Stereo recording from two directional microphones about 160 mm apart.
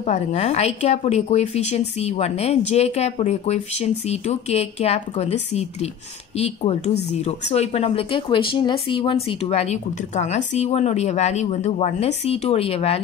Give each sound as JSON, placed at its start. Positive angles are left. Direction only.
{"t": 0.0, "sound": "a woman's voice", "side_deg": 40}